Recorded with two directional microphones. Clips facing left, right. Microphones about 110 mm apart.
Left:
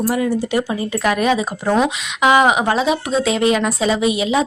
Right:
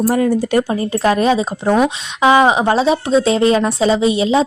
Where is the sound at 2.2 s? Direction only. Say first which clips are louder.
Right 2 dB; 30° right (ahead or behind).